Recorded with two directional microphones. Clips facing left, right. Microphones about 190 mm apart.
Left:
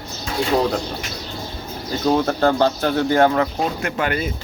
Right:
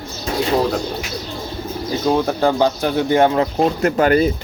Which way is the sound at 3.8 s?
40° right (ahead or behind).